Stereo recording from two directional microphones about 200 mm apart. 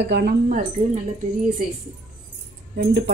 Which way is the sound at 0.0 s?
55° right (ahead or behind).